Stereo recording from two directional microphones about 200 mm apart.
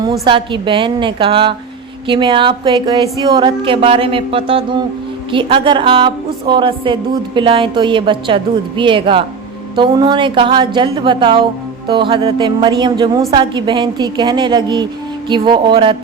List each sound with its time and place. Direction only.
0.0 s a woman's voice: 25° right (ahead or behind)